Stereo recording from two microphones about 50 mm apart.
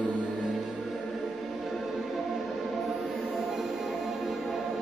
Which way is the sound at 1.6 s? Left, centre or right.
Centre.